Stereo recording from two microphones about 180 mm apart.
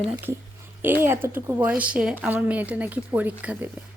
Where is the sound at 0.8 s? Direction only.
10° right (ahead or behind).